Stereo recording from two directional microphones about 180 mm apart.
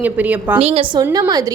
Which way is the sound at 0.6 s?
35° right (ahead or behind).